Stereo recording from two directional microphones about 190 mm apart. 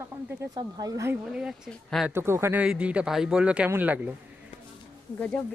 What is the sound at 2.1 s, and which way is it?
Speech, 15° right (ahead or behind).